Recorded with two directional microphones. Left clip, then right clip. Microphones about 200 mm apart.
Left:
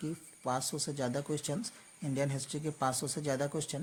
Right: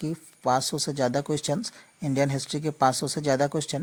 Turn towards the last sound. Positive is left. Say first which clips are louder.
# right 10 dB
turn(degrees=-40)  # may be behind; listen again after turning